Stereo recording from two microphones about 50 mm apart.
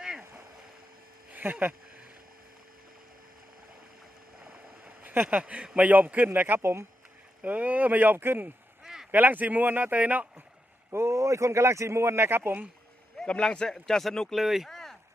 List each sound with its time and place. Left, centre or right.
1.3 s speech: right
4.4 s boat: right
5.7 s speech: right
6.6 s speech: right
7.4 s speech: right
8.8 s a sound: centre
9.1 s speech: right
10.9 s speech: right
13.2 s speech: left
14.3 s speech: centre
14.7 s a sound: centre